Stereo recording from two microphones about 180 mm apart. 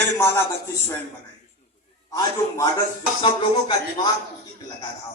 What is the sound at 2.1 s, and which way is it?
A man's voice, 20° left (ahead or behind).